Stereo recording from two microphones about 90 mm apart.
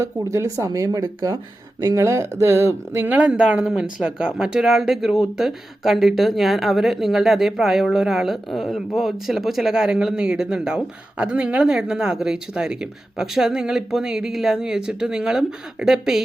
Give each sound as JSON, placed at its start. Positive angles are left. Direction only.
{"t": 0.0, "sound": "speech", "side_deg": -40}
{"t": 3.1, "sound": "a woman's voice", "side_deg": -15}